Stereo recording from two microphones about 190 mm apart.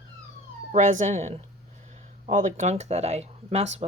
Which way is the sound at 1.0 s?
40° right (ahead or behind).